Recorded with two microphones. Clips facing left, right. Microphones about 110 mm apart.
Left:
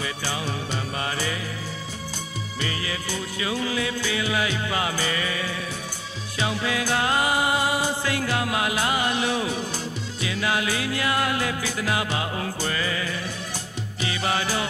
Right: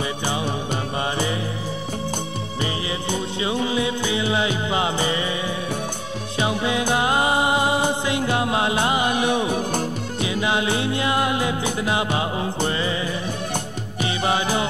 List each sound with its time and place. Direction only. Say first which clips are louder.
2.6 s music: right 4 dB; 25° right (ahead or behind)
6.4 s music: right 4 dB; 20° right (ahead or behind)
9.5 s music: right 6 dB; 55° right (ahead or behind)
10.2 s music: right 3 dB; 20° right (ahead or behind)